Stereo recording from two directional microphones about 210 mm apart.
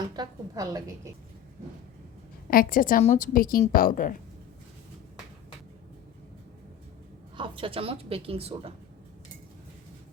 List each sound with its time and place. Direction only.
0.0 s a woman's voice: 15° right (ahead or behind)
2.5 s a woman's voice: 40° left (ahead or behind)
7.3 s a woman's voice: 25° right (ahead or behind)